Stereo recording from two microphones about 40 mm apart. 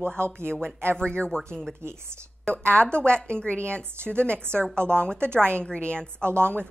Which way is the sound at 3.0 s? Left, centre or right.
Left.